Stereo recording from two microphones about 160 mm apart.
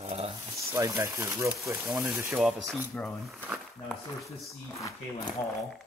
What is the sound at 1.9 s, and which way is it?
Speech, centre (ahead or behind).